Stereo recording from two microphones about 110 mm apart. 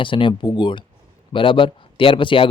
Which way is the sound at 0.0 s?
50° left (ahead or behind).